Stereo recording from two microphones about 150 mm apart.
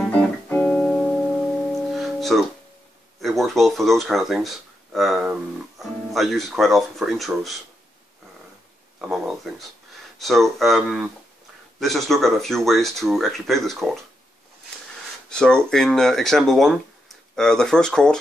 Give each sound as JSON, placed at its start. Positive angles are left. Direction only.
{"t": 0.5, "sound": "music", "side_deg": 10}
{"t": 3.2, "sound": "speech", "side_deg": 0}
{"t": 9.0, "sound": "speech", "side_deg": 0}
{"t": 15.2, "sound": "speech", "side_deg": 5}